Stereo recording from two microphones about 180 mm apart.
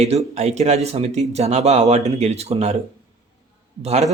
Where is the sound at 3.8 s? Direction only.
35° right (ahead or behind).